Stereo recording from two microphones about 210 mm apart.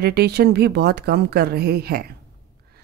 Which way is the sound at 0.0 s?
50° right (ahead or behind).